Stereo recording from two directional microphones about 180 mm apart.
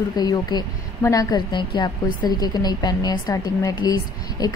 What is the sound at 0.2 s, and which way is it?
A woman's voice, 20° left (ahead or behind).